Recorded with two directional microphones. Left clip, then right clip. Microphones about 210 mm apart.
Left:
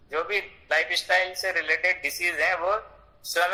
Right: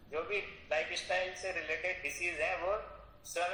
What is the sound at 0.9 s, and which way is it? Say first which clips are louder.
A man's voice: left 12 dB; 55° left (ahead or behind).